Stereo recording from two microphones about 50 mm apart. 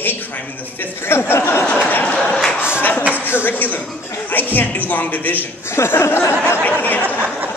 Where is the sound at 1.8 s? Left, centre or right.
Left.